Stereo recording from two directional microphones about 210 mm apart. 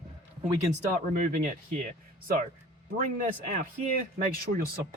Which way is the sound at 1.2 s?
35° right (ahead or behind).